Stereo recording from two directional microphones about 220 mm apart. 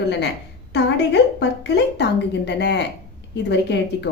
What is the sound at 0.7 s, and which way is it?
A woman's voice, 50° left (ahead or behind).